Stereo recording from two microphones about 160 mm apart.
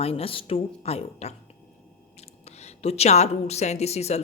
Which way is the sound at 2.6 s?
40° left (ahead or behind).